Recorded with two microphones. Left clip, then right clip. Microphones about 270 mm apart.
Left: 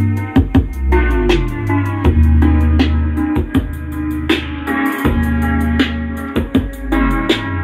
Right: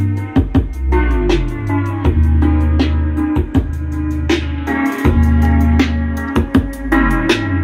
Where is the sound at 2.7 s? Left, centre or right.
Left.